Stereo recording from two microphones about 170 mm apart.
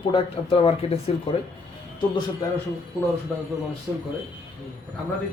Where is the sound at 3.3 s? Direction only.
10° left (ahead or behind).